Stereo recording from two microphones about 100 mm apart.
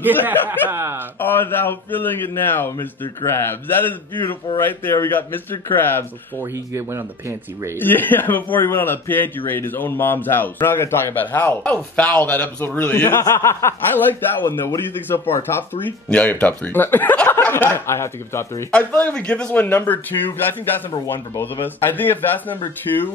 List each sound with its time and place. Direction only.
0.3 s speech: 20° right (ahead or behind)
1.2 s a man's voice: 20° left (ahead or behind)
6.4 s speech: 25° right (ahead or behind)
7.8 s a man's voice: 20° left (ahead or behind)
18.7 s a man's voice: 10° left (ahead or behind)
21.4 s a man's voice: 20° left (ahead or behind)